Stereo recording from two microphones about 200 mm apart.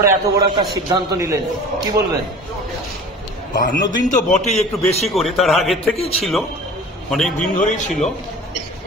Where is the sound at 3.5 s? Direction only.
40° left (ahead or behind).